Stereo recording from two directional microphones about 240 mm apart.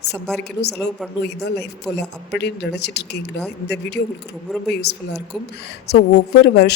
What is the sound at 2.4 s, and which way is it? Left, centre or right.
A woman's voice, left.